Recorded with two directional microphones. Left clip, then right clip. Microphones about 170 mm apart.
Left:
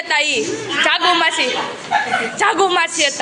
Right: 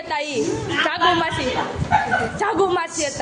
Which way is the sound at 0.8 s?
5° right (ahead or behind).